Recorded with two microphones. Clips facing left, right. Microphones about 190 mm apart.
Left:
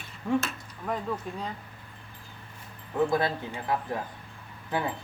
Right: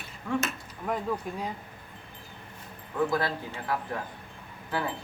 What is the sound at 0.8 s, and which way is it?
Speech, 5° right (ahead or behind).